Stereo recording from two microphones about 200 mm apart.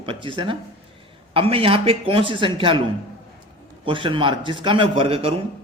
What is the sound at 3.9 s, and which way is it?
Speech, 25° right (ahead or behind).